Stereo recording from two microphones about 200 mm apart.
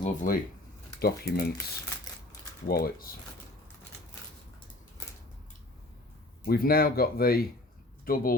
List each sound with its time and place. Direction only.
0.0 s speech: 40° left (ahead or behind)
0.9 s speech: 50° left (ahead or behind)
2.6 s speech: 50° left (ahead or behind)
5.0 s tick-tock: 15° left (ahead or behind)
6.4 s speech: 50° left (ahead or behind)